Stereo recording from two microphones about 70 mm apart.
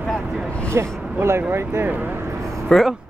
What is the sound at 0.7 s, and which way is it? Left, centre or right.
Speech, right.